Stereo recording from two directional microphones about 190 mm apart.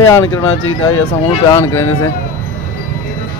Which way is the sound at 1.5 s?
15° left (ahead or behind).